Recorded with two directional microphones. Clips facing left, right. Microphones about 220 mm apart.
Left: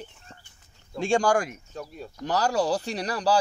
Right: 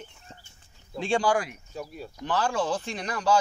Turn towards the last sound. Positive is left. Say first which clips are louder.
# left 1 dB
turn(degrees=35)  # may be behind; listen again after turning